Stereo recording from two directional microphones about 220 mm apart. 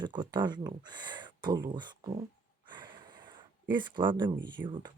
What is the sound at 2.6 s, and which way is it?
Snort, 20° right (ahead or behind).